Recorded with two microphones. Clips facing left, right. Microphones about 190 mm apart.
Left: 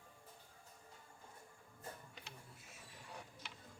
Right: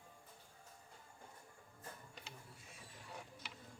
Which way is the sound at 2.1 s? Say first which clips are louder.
Right 1 dB; centre (ahead or behind).